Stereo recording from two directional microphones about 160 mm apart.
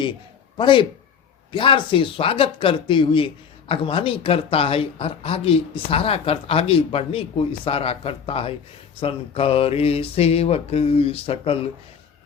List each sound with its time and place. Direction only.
0.5 s speech: 30° left (ahead or behind)